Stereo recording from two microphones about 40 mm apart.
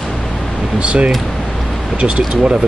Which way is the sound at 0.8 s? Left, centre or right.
Right.